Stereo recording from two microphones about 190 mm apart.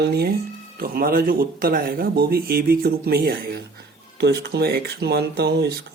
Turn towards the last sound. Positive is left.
turn(degrees=-60)  # may be behind; listen again after turning